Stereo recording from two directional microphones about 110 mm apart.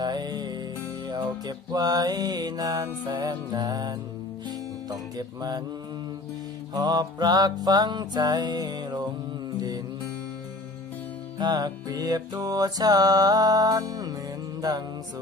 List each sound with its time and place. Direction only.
0.0 s music: 40° right (ahead or behind)
6.7 s music: 40° right (ahead or behind)
11.3 s music: 40° right (ahead or behind)